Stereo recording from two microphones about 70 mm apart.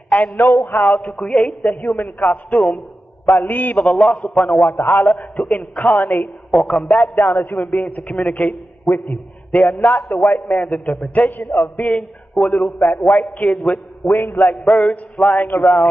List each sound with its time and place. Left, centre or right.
0.1 s a man's voice: left
3.8 s a man's voice: centre
5.1 s a man's voice: centre
6.5 s a man's voice: centre; by 14.6 s left
14.6 s a man's voice: centre